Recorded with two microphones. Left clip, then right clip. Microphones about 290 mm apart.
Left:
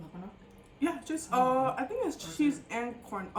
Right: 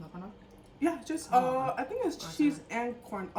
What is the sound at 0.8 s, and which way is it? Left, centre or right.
Speech, centre.